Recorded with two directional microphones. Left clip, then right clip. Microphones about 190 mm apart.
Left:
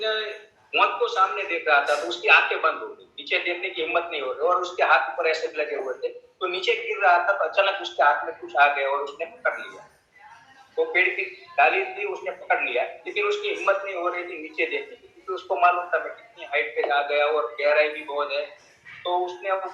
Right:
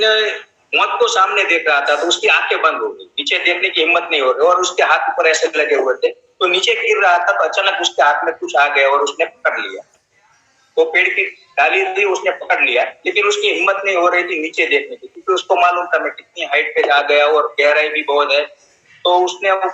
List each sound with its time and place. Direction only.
0.0 s speech: 45° right (ahead or behind)
10.8 s speech: 45° right (ahead or behind)